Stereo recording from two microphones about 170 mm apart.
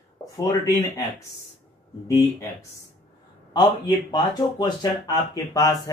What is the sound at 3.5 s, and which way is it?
Speech, 25° left (ahead or behind).